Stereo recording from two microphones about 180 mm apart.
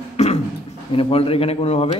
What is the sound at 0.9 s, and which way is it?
A man's voice, 30° left (ahead or behind).